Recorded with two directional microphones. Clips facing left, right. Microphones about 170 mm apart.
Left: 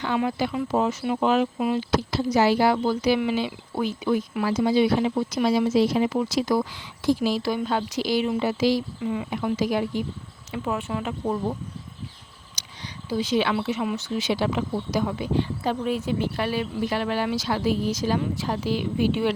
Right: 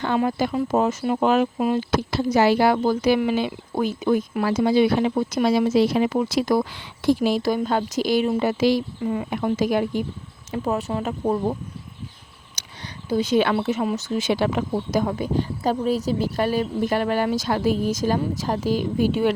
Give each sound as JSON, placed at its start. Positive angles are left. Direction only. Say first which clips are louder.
{"t": 0.0, "sound": "speech", "louder": "right 3 dB", "side_deg": -45}
{"t": 10.5, "sound": "speech", "louder": "right 3 dB", "side_deg": -40}
{"t": 12.6, "sound": "a sound", "louder": "right 1 dB", "side_deg": -55}
{"t": 13.1, "sound": "speech", "louder": "right 4 dB", "side_deg": -50}